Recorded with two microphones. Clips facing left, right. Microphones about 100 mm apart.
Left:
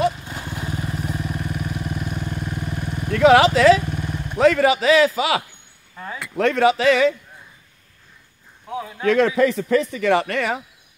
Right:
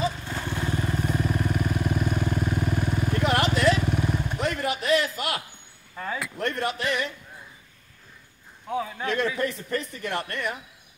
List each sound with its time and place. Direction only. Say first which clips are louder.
0.2 s vehicle: right 1 dB; 15° left (ahead or behind)
3.1 s vehicle: left 13 dB; 90° left
3.8 s vehicle: right 2 dB; centre (ahead or behind)
4.4 s a man's voice: left 16 dB; 90° left
5.9 s speech: right 1 dB; centre (ahead or behind)
6.3 s a man's voice: left 14 dB; 90° left
8.6 s a man's voice: right 1 dB; 5° left (ahead or behind)
9.0 s a man's voice: left 12 dB; 90° left